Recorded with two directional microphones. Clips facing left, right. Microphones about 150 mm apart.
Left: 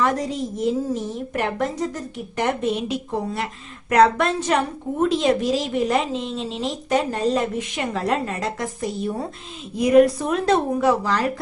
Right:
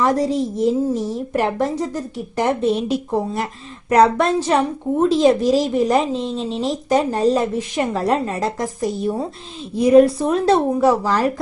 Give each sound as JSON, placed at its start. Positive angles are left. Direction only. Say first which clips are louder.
{"t": 0.0, "sound": "a woman's voice", "louder": "right 5 dB", "side_deg": -35}